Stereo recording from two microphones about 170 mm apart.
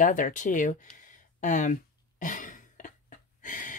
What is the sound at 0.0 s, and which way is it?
A woman's voice, 50° left (ahead or behind).